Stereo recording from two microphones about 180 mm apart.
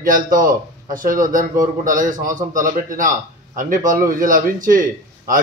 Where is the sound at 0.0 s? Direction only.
50° right (ahead or behind).